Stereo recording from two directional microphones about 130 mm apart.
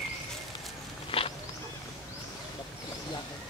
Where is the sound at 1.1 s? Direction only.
50° left (ahead or behind).